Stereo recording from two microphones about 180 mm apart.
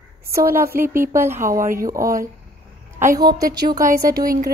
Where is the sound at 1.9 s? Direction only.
15° right (ahead or behind).